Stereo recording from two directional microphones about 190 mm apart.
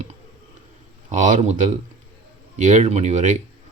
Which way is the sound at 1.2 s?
40° right (ahead or behind).